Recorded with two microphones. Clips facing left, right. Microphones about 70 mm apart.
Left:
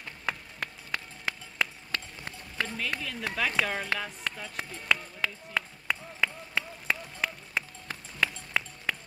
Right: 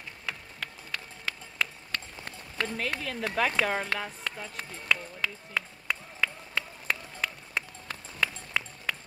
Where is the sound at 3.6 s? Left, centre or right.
Right.